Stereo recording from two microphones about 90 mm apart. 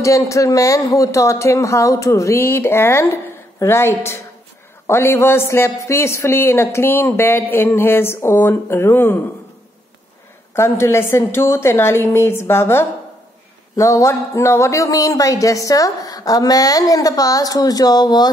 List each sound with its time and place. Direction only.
0.0 s a man's voice: 35° left (ahead or behind)
10.5 s a man's voice: 30° left (ahead or behind); by 18.3 s 50° left (ahead or behind)